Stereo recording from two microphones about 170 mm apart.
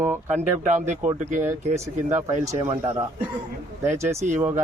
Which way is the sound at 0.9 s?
45° right (ahead or behind).